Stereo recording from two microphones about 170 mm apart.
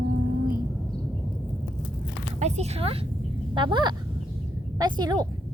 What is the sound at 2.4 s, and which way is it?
A woman's voice, 40° right (ahead or behind).